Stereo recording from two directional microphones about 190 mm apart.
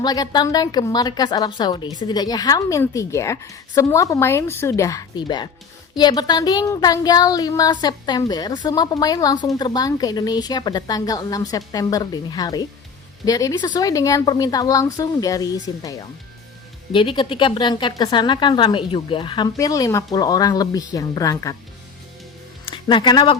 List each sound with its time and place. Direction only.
0.0 s a woman's voice: 20° left (ahead or behind)
16.9 s a woman's voice: 25° left (ahead or behind)
22.6 s speech: 25° left (ahead or behind)